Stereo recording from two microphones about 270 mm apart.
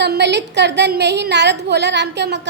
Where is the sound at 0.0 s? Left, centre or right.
Right.